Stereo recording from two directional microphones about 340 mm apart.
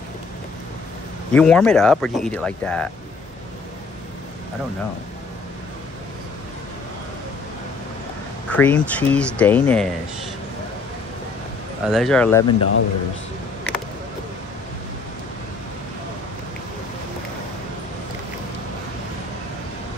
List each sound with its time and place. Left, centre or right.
1.3 s speech: centre
8.5 s speech: centre
11.8 s speech: centre
12.4 s a man's voice: left